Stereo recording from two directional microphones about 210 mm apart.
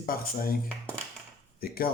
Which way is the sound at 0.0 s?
45° left (ahead or behind).